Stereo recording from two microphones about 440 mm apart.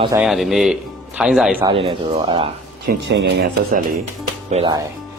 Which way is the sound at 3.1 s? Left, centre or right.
Right.